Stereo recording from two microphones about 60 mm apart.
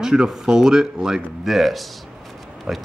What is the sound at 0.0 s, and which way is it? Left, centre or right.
Speech, centre.